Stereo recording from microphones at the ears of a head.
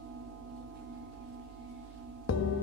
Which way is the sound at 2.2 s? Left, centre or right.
Left.